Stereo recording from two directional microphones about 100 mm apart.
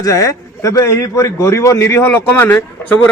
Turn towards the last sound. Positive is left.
turn(degrees=15)  # may be behind; listen again after turning